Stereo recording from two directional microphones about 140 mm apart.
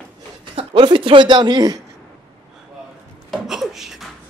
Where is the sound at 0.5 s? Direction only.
35° right (ahead or behind).